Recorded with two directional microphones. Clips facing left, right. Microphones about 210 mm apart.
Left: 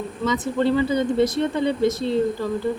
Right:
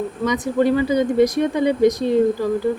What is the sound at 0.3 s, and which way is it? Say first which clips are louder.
Speech: right 3 dB; 15° right (ahead or behind).